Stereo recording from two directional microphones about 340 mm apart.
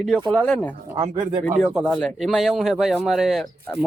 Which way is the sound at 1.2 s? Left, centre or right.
Right.